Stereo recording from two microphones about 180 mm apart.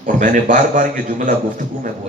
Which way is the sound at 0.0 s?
45° right (ahead or behind).